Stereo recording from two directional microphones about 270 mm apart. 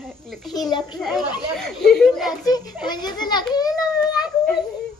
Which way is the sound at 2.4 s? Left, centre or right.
Centre.